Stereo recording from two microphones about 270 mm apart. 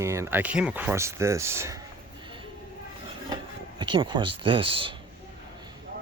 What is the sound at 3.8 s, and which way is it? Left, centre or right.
Speech, centre.